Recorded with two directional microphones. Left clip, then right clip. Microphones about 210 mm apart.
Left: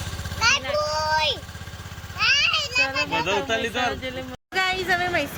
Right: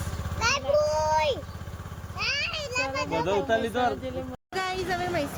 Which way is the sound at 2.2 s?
35° right (ahead or behind).